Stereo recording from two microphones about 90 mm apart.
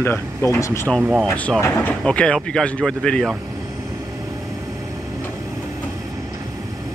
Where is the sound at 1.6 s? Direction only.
20° left (ahead or behind).